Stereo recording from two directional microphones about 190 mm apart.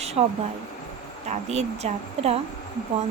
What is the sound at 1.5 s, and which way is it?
Speech, 35° right (ahead or behind).